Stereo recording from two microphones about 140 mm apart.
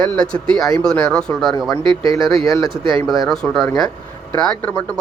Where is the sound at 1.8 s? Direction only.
35° right (ahead or behind).